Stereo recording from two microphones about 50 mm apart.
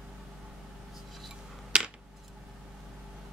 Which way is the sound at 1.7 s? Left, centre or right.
Centre.